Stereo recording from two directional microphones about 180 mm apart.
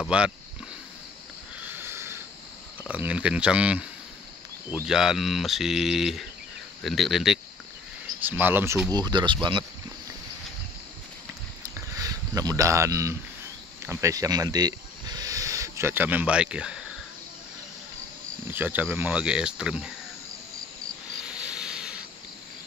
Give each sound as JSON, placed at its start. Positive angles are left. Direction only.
{"t": 0.1, "sound": "speech", "side_deg": -5}
{"t": 1.7, "sound": "a sound", "side_deg": -15}
{"t": 2.9, "sound": "speech", "side_deg": -5}
{"t": 4.8, "sound": "speech", "side_deg": -5}
{"t": 8.9, "sound": "speech", "side_deg": -25}
{"t": 11.7, "sound": "a sound", "side_deg": -20}
{"t": 13.8, "sound": "speech", "side_deg": -15}
{"t": 18.5, "sound": "speech", "side_deg": -10}
{"t": 21.2, "sound": "hiss", "side_deg": -5}